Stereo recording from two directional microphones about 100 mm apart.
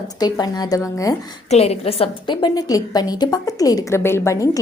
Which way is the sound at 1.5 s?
90° left.